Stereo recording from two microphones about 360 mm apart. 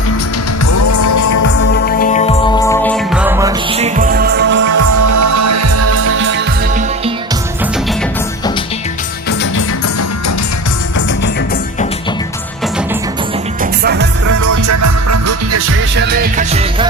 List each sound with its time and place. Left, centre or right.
0.6 s music: left
1.8 s music: left; by 4.6 s right
4.7 s music: right
9.4 s music: left
13.6 s music: right
14.4 s music: right
16.0 s music: right